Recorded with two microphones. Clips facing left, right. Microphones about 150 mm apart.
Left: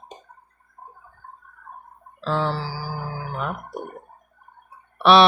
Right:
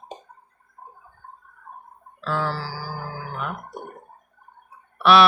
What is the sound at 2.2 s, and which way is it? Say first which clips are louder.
Mantra: left 2 dB; 25° left (ahead or behind).